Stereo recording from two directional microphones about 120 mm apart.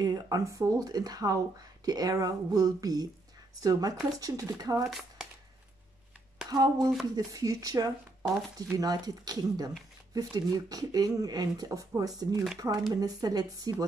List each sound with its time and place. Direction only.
0.0 s speech: 30° right (ahead or behind)
6.5 s speech: 35° right (ahead or behind)